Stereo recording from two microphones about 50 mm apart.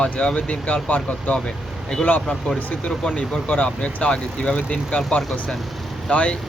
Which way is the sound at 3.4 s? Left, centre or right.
Left.